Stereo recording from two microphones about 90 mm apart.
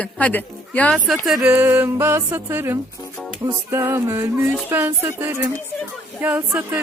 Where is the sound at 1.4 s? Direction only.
20° right (ahead or behind).